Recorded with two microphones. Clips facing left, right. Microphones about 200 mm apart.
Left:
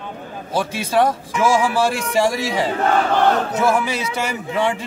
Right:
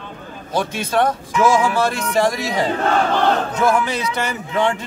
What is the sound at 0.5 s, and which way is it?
Speech, 10° left (ahead or behind).